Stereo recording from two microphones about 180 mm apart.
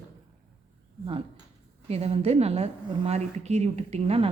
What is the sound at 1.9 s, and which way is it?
A woman's voice, 35° right (ahead or behind).